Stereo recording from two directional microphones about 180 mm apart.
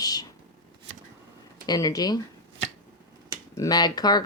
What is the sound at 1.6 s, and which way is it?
Speech, 20° left (ahead or behind).